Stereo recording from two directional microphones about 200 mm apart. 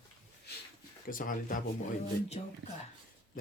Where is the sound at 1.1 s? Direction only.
45° left (ahead or behind).